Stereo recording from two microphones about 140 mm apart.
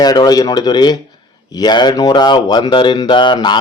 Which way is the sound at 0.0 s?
30° left (ahead or behind).